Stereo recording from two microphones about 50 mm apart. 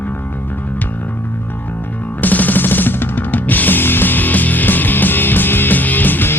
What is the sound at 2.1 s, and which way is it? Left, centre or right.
Music, left.